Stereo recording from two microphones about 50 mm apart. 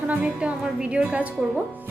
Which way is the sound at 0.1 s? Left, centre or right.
Right.